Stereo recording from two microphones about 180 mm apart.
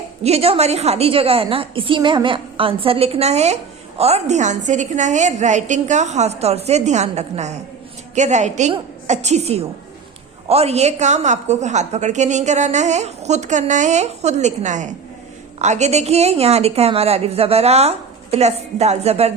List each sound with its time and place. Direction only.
0.2 s a woman's voice: 35° right (ahead or behind)